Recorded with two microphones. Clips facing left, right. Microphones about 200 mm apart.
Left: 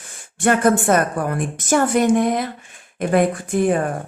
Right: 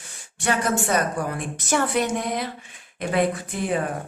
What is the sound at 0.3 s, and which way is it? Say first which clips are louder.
A woman's voice: left 7 dB; 55° left (ahead or behind).